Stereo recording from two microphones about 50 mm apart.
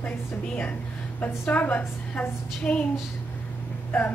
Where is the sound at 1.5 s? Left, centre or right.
Left.